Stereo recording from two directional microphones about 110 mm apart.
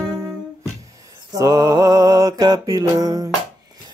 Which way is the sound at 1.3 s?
35° right (ahead or behind).